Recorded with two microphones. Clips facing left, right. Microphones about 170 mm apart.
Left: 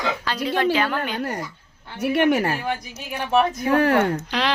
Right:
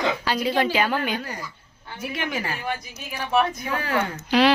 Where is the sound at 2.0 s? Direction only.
65° left (ahead or behind).